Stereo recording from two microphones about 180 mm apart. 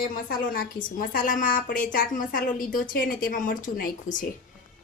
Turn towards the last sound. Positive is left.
turn(degrees=50)  # may be behind; listen again after turning